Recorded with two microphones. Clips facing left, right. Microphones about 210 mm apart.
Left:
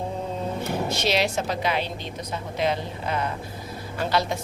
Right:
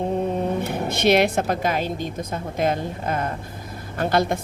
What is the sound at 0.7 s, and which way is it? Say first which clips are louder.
A woman's voice: right 5 dB; 55° right (ahead or behind).